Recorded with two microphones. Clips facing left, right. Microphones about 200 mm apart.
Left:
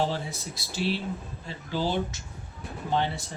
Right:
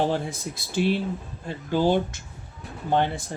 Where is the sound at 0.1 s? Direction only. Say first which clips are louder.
Right 6 dB; 50° right (ahead or behind).